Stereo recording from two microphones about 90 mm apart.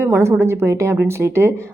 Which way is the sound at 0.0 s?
30° right (ahead or behind).